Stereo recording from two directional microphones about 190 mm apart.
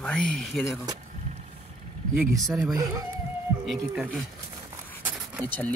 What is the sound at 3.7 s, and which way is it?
Speech, centre (ahead or behind).